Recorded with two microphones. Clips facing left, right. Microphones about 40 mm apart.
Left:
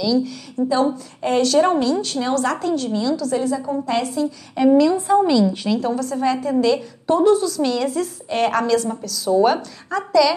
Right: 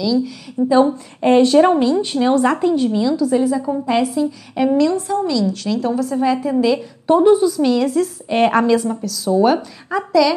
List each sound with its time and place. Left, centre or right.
0.0 s a woman's voice: centre
0.7 s a woman's voice: right; by 4.7 s centre
4.9 s a woman's voice: left
5.7 s a woman's voice: centre
7.1 s a woman's voice: centre
8.3 s a woman's voice: centre
8.8 s a woman's voice: centre